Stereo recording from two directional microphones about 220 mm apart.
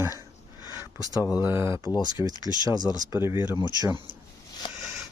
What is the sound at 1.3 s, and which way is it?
Speech, 10° right (ahead or behind).